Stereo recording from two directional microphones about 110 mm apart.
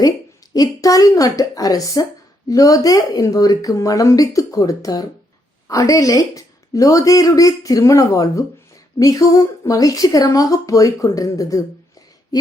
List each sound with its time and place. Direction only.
0.5 s a woman's voice: 35° left (ahead or behind)